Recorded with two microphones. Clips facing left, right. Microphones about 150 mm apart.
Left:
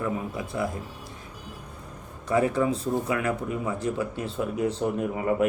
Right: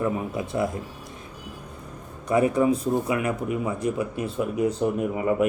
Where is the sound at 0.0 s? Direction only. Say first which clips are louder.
Right 3 dB; 25° right (ahead or behind).